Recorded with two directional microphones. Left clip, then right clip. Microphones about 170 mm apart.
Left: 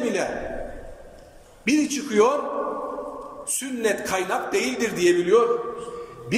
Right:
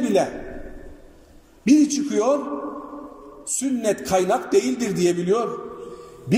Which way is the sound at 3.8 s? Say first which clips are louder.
Right 3 dB; 45° right (ahead or behind).